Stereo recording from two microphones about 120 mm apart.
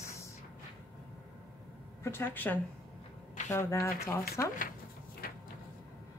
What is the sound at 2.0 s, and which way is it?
A woman's voice, 20° left (ahead or behind).